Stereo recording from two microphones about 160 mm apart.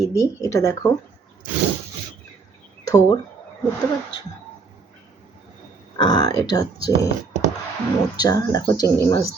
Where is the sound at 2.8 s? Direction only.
25° left (ahead or behind).